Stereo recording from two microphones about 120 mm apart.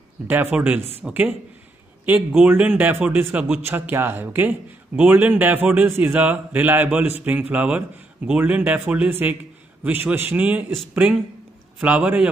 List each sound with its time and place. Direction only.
0.3 s a man's voice: 15° right (ahead or behind)
11.8 s a man's voice: 10° right (ahead or behind)